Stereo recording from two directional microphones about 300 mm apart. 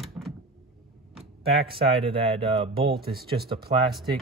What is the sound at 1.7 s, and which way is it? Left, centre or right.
Speech, centre.